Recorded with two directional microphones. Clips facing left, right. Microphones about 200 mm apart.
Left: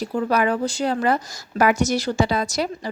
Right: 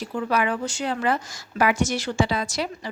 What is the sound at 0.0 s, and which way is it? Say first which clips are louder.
A woman's voice: left 4 dB; 40° left (ahead or behind).